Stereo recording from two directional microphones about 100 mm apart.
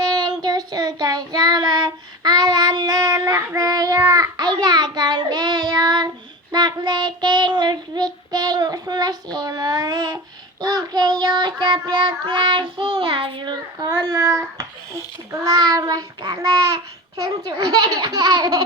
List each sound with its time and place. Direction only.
0.0 s child singing: 45° right (ahead or behind)
17.4 s speech: 45° right (ahead or behind)